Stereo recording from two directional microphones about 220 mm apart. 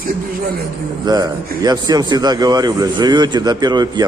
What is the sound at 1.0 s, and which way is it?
Speech, 15° right (ahead or behind).